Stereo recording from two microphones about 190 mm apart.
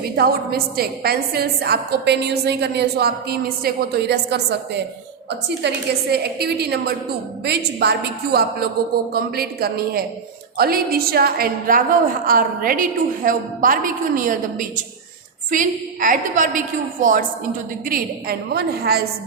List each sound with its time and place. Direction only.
0.0 s a woman's voice: 55° right (ahead or behind)